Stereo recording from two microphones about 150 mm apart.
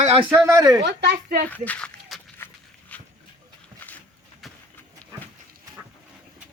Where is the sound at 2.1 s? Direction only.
Centre (ahead or behind).